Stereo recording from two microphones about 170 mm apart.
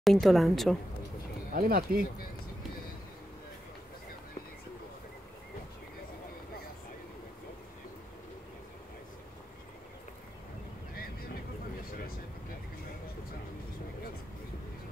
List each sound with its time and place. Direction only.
0.0 s a woman's voice: centre (ahead or behind)
1.5 s speech: 55° right (ahead or behind)